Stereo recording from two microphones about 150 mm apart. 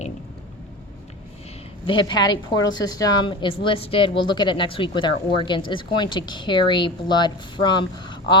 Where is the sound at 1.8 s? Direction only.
35° left (ahead or behind).